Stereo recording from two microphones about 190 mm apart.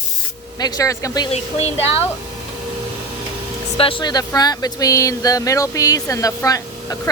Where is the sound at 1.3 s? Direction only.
30° left (ahead or behind).